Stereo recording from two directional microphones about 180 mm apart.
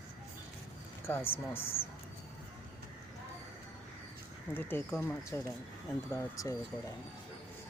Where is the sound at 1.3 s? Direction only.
15° left (ahead or behind).